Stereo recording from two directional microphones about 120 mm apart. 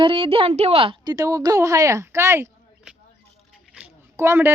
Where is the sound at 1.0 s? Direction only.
30° right (ahead or behind).